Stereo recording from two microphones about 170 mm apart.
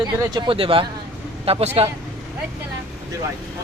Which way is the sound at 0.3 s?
30° right (ahead or behind).